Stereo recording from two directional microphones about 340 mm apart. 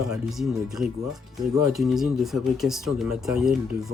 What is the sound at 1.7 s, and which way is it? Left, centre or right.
Speech, centre.